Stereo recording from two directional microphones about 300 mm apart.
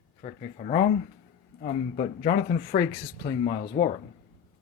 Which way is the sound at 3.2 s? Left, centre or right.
Left.